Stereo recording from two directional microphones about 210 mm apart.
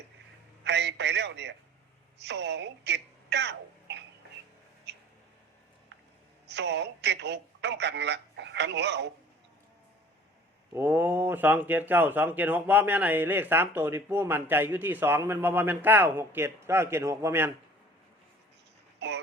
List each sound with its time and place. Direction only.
0.6 s a sound: 55° right (ahead or behind)
2.1 s speech: 55° right (ahead or behind)
4.9 s a sound: 55° right (ahead or behind)
6.5 s a man's voice: 55° right (ahead or behind)
10.8 s speech: 10° right (ahead or behind)
18.9 s dog: 55° right (ahead or behind)